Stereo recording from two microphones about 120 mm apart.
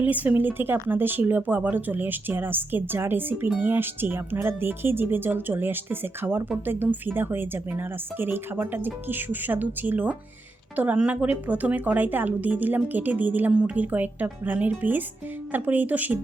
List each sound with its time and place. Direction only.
0.0 s a woman's voice: 15° right (ahead or behind)